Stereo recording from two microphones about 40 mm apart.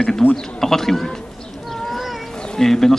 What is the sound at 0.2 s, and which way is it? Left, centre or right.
Speech, left.